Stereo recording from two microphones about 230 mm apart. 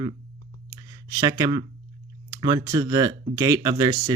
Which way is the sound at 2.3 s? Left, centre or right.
Centre.